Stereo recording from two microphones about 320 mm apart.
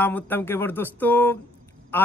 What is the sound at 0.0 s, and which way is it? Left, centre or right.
A man's voice, centre.